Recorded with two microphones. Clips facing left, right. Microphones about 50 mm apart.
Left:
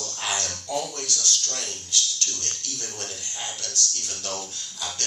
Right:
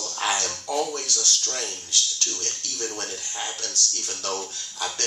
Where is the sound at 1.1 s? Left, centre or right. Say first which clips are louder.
Right 1 dB; right.